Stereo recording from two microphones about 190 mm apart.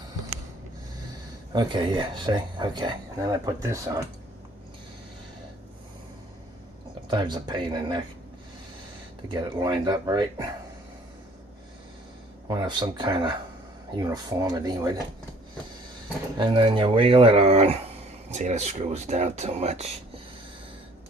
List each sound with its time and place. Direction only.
1.5 s speech: 25° right (ahead or behind)
7.1 s speech: 25° right (ahead or behind)
9.3 s speech: 20° right (ahead or behind)
12.5 s speech: 20° right (ahead or behind)
16.4 s speech: 25° right (ahead or behind)